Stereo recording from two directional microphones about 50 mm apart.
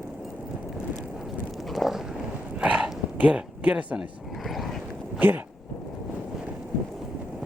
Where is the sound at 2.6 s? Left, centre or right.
Right.